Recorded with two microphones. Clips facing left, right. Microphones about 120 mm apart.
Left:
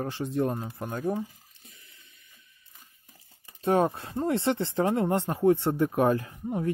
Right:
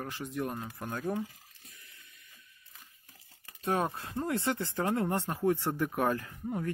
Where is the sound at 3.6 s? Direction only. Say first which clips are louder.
Left 7 dB; 30° left (ahead or behind).